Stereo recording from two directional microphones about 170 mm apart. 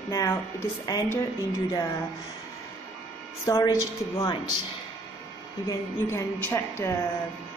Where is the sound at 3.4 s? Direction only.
20° left (ahead or behind).